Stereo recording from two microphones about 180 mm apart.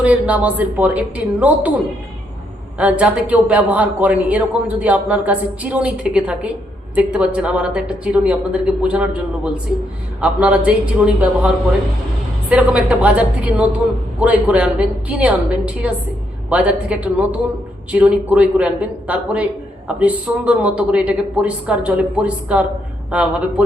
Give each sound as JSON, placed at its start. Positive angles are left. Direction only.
{"t": 0.0, "sound": "a man's voice", "side_deg": -10}
{"t": 2.7, "sound": "a man's voice", "side_deg": -5}